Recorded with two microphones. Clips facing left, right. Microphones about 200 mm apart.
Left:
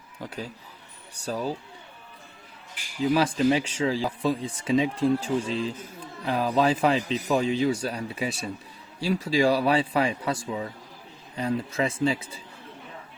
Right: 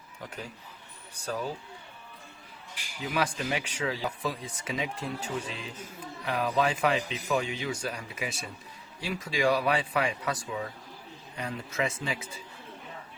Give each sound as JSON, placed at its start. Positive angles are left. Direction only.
{"t": 0.2, "sound": "speech", "side_deg": 35}
{"t": 3.0, "sound": "speech", "side_deg": 30}